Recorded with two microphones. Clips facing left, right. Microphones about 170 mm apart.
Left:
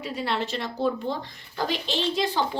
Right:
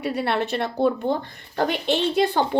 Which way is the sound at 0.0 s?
65° right (ahead or behind).